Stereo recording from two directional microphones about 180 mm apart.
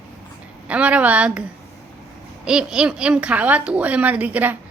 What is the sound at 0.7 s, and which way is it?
A woman's voice, 5° right (ahead or behind).